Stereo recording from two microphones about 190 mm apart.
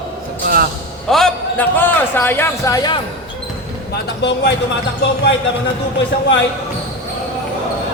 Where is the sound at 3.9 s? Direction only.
65° left (ahead or behind).